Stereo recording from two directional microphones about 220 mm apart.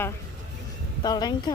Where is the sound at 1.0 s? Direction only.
20° left (ahead or behind).